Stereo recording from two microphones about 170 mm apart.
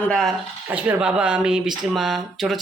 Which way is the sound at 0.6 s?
10° right (ahead or behind).